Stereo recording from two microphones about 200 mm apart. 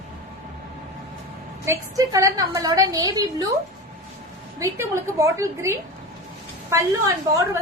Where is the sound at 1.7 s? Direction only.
15° right (ahead or behind).